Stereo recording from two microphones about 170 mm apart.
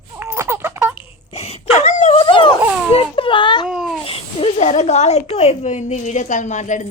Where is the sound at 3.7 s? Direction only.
5° right (ahead or behind).